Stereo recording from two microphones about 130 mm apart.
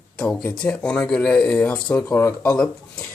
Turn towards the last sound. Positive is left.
turn(degrees=5)  # may be behind; listen again after turning